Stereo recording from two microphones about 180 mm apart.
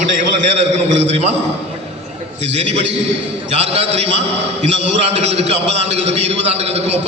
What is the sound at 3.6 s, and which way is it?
A man's voice, 35° right (ahead or behind).